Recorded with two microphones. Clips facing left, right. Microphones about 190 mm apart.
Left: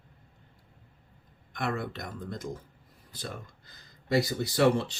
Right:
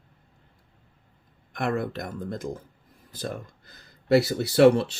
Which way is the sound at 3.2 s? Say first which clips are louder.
Right 7 dB; 60° right (ahead or behind).